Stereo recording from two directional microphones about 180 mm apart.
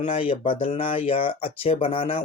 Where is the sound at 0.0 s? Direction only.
35° left (ahead or behind).